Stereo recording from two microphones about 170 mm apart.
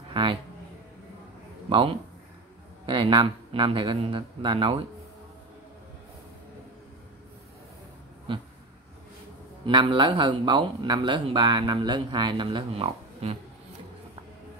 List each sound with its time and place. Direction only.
0.1 s speech: 30° right (ahead or behind)
1.7 s speech: 30° right (ahead or behind)
8.3 s speech: 30° right (ahead or behind)
9.7 s speech: 30° right (ahead or behind)